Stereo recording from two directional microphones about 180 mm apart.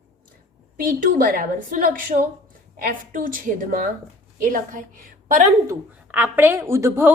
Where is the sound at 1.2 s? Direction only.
50° right (ahead or behind).